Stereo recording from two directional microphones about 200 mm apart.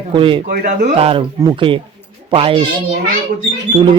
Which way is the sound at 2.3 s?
25° right (ahead or behind).